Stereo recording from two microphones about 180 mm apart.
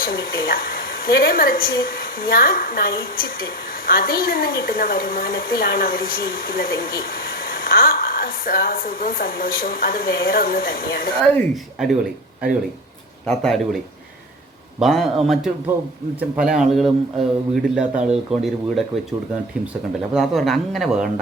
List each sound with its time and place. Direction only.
0.0 s a woman's voice: 55° left (ahead or behind)
11.2 s speech: 10° left (ahead or behind)
13.2 s speech: 5° left (ahead or behind)
20.1 s speech: centre (ahead or behind)